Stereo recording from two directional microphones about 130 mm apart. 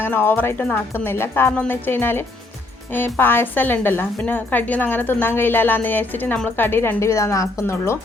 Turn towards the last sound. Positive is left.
turn(degrees=20)  # may be behind; listen again after turning